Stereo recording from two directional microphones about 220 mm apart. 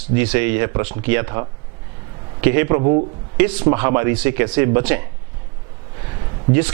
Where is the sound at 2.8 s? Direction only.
25° right (ahead or behind).